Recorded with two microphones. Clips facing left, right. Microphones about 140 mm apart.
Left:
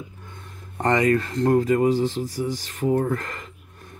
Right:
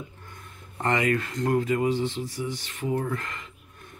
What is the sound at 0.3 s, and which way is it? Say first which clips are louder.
Speech: left 3 dB; 30° left (ahead or behind).